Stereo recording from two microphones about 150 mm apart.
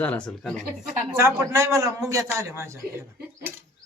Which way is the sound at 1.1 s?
20° right (ahead or behind).